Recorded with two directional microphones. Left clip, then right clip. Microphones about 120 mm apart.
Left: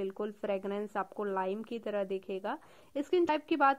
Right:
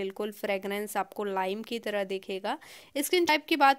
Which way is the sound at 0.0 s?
35° right (ahead or behind).